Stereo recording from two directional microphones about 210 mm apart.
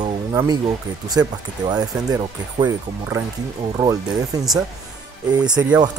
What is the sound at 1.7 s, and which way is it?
Speech, 20° right (ahead or behind).